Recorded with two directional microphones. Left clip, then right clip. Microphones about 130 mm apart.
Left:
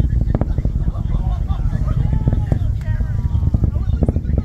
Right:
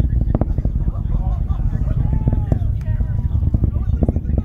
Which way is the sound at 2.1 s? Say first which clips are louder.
Even; 40° left (ahead or behind).